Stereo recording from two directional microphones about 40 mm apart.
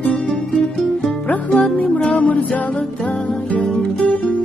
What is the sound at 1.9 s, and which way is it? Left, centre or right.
Music, left.